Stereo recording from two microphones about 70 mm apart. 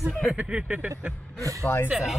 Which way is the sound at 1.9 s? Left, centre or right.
Centre.